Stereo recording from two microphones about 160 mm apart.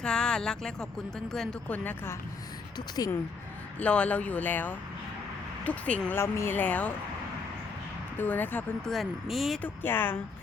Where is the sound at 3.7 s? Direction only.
10° left (ahead or behind).